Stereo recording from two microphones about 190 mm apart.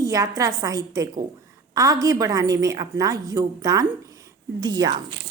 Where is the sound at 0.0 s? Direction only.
15° right (ahead or behind).